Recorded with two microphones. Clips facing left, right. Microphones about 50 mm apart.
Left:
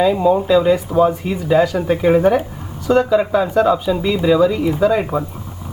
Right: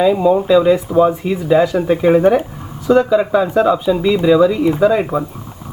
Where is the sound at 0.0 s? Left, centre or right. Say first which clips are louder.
Right 2 dB; centre.